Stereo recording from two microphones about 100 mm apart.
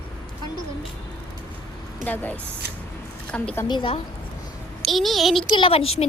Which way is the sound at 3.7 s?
55° left (ahead or behind).